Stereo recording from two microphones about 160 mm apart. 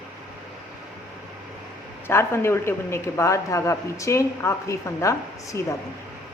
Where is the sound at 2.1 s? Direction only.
15° left (ahead or behind).